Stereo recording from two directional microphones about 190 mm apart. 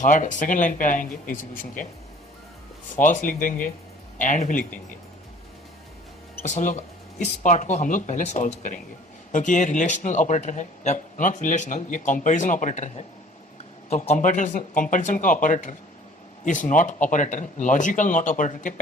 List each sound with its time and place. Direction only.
0.0 s speech: 40° left (ahead or behind)
2.9 s speech: 40° left (ahead or behind)
6.4 s speech: 40° left (ahead or behind)